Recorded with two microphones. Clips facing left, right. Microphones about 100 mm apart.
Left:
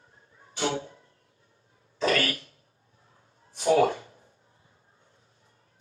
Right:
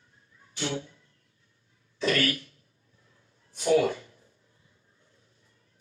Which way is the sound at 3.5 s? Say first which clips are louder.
Left 2 dB; 35° left (ahead or behind).